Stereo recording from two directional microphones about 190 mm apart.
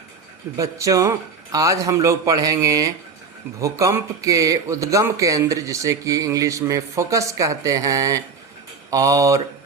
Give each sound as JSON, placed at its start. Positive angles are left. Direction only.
{"t": 0.5, "sound": "a man's voice", "side_deg": -15}